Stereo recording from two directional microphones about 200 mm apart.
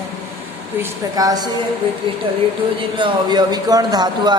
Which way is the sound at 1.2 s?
20° right (ahead or behind).